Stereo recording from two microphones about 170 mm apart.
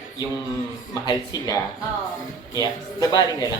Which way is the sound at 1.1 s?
20° left (ahead or behind).